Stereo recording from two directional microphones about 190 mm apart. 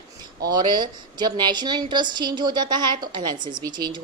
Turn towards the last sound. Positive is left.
turn(degrees=-25)  # may be behind; listen again after turning